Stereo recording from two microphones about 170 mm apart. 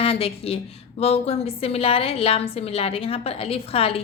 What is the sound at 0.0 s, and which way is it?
A woman's voice, 35° left (ahead or behind).